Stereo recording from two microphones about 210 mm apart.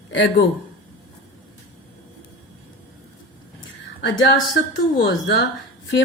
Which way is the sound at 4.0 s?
55° left (ahead or behind).